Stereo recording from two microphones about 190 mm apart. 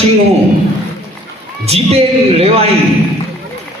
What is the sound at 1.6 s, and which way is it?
A man's voice, 30° right (ahead or behind).